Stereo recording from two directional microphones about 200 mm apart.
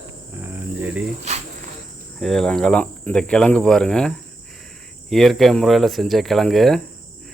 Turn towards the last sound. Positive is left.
turn(degrees=0)  # may be behind; listen again after turning